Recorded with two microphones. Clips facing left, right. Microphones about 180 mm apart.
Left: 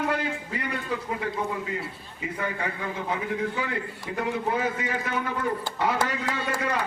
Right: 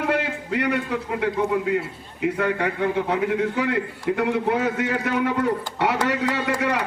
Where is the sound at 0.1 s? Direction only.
75° right (ahead or behind).